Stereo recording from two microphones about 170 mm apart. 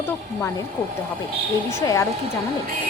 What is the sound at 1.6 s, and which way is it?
Speech, 15° left (ahead or behind).